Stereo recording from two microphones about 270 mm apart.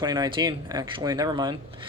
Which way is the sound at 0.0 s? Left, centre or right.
Centre.